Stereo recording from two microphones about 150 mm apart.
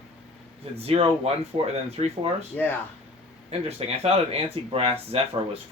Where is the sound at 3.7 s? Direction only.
45° right (ahead or behind).